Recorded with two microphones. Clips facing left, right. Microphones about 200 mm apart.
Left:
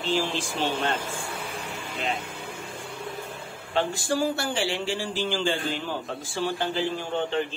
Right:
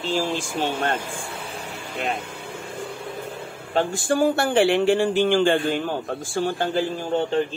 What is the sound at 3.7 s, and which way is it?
Speech, 50° right (ahead or behind).